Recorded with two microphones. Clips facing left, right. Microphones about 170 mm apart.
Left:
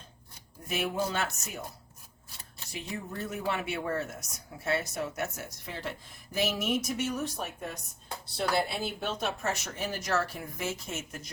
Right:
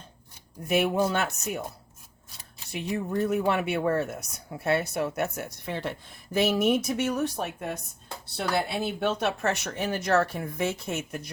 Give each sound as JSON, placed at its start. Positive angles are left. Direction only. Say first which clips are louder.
{"t": 0.7, "sound": "speech", "louder": "right 7 dB", "side_deg": -60}
{"t": 2.7, "sound": "speech", "louder": "right 9 dB", "side_deg": -60}
{"t": 9.0, "sound": "speech", "louder": "right 6 dB", "side_deg": -65}